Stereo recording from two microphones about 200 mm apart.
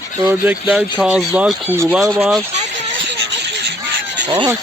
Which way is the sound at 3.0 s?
60° right (ahead or behind).